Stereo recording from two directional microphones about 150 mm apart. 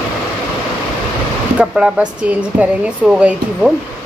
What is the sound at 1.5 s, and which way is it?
Speech, 5° right (ahead or behind).